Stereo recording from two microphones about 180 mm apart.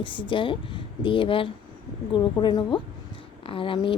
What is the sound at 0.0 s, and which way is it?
Speech, 30° left (ahead or behind).